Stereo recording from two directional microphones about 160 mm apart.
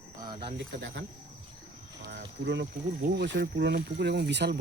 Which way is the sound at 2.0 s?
90° right.